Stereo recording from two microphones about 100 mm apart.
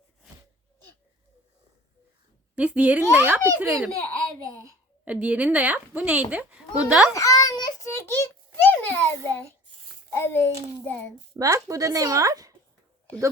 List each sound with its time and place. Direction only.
2.6 s a woman's voice: 15° right (ahead or behind)
3.7 s a child's voice: centre (ahead or behind)
5.0 s a woman's voice: 10° right (ahead or behind)
7.1 s child singing: 35° left (ahead or behind)
7.9 s a sound: 25° left (ahead or behind)
10.2 s a child's voice: 25° left (ahead or behind)
11.3 s speech: 35° right (ahead or behind)